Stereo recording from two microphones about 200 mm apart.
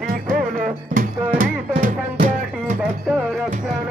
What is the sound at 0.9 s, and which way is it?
Music, 40° right (ahead or behind).